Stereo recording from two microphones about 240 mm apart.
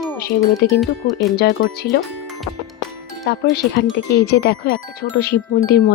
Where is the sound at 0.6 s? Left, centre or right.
Left.